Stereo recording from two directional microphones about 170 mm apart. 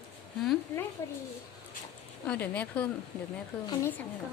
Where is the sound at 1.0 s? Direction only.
15° left (ahead or behind).